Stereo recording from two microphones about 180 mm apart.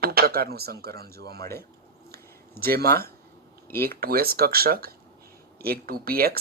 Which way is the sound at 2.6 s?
60° right (ahead or behind).